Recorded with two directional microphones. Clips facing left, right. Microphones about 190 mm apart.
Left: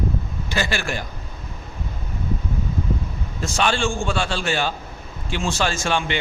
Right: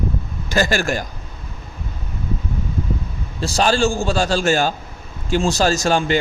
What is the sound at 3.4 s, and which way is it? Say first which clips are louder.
A man's voice: right 5 dB; 35° right (ahead or behind).